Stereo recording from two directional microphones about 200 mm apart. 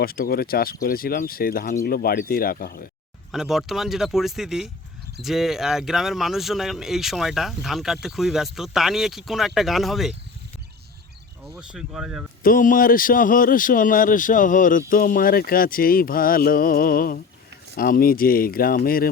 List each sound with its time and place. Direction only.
0.0 s a man's voice: 50° left (ahead or behind)
3.3 s speech: centre (ahead or behind)
11.7 s speech: 5° right (ahead or behind)
12.4 s a man's voice: 45° left (ahead or behind)